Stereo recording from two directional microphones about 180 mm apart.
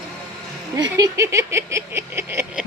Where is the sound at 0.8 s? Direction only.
20° right (ahead or behind).